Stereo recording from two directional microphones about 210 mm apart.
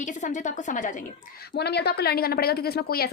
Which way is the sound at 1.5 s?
50° left (ahead or behind).